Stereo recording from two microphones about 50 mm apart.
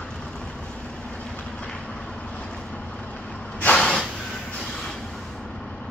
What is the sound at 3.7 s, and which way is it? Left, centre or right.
Snort, centre.